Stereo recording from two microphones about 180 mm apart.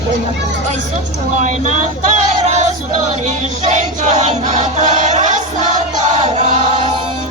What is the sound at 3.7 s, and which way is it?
Music, 40° right (ahead or behind).